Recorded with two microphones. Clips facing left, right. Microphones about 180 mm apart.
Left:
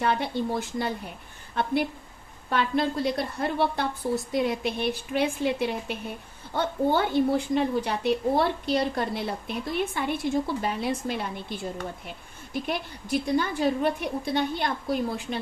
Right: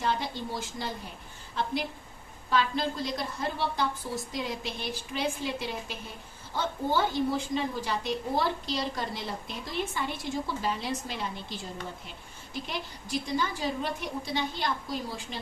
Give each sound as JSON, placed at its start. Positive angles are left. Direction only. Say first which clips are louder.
{"t": 0.0, "sound": "a woman's voice", "louder": "left 5 dB", "side_deg": 60}
{"t": 2.5, "sound": "a woman's voice", "louder": "left 3 dB", "side_deg": 60}